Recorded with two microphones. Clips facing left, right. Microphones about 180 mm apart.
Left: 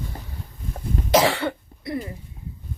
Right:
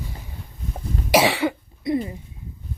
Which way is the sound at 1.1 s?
10° right (ahead or behind).